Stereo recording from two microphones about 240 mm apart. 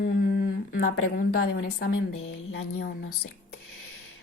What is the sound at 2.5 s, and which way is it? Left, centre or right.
Speech, left.